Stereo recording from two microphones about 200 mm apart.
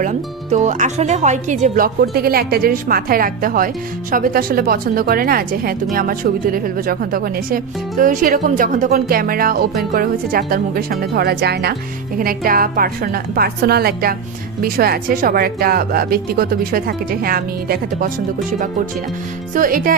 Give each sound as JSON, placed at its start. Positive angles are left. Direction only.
{"t": 0.0, "sound": "a woman's voice", "side_deg": -35}
{"t": 19.5, "sound": "a woman's voice", "side_deg": -45}